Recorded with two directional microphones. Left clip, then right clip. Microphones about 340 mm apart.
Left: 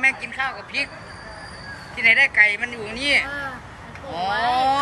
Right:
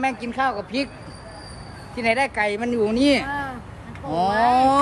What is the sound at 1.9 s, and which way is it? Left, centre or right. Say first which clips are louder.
Speech: left 6 dB; centre.